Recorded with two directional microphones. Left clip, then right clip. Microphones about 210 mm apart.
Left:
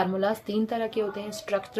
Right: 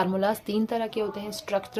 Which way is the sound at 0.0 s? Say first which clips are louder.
Right 1 dB; 25° right (ahead or behind).